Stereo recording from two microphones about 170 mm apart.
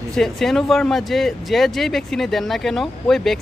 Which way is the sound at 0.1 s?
Centre (ahead or behind).